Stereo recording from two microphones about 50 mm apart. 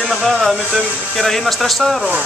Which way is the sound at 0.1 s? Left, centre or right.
Centre.